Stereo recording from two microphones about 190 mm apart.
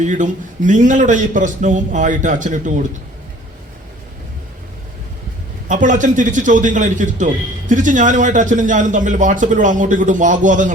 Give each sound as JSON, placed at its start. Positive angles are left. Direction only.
{"t": 0.0, "sound": "a man's voice", "side_deg": -40}
{"t": 5.6, "sound": "a man's voice", "side_deg": -40}